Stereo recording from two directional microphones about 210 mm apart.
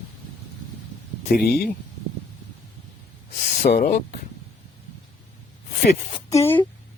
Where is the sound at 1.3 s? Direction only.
45° left (ahead or behind).